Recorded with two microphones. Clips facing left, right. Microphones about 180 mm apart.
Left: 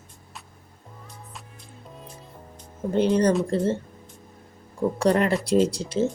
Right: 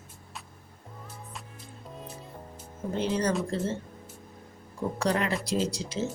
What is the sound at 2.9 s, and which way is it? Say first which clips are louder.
Speech: left 8 dB; 60° left (ahead or behind).